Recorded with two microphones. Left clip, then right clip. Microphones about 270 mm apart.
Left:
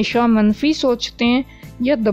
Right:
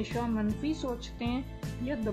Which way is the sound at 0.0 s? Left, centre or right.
Left.